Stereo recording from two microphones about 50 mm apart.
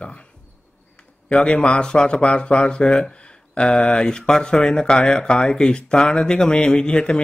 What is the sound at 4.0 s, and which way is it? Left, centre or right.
Speech, centre.